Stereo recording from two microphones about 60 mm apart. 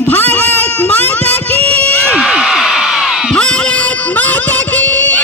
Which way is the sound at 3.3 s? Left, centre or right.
Centre.